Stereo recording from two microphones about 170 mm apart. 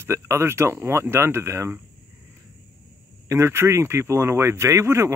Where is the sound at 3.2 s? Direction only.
15° right (ahead or behind).